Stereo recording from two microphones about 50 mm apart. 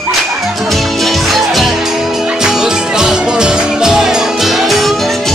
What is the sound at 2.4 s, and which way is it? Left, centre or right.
Music, centre.